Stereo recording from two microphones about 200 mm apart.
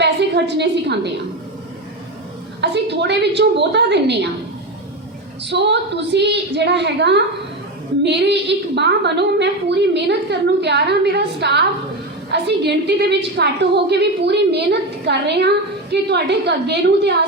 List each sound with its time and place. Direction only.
0.0 s a woman's voice: 60° right (ahead or behind)
2.6 s a woman's voice: 60° right (ahead or behind)
5.5 s a woman's voice: 60° right (ahead or behind)